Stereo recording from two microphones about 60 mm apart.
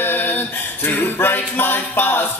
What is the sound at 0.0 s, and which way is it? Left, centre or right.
Music, left.